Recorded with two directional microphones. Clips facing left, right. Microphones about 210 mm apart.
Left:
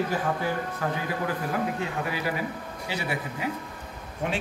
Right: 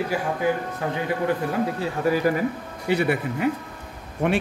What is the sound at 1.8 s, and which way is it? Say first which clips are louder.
Speech: right 8 dB; 40° right (ahead or behind).